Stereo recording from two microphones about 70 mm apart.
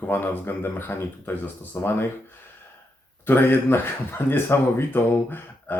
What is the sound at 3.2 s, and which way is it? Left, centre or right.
Speech, left.